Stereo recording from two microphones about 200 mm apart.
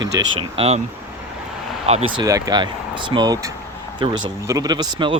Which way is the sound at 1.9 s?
30° right (ahead or behind).